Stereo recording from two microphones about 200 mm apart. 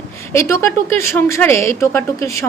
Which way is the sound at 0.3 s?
15° left (ahead or behind).